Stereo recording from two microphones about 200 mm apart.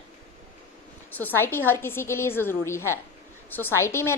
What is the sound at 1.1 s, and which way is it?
A woman's voice, 10° left (ahead or behind).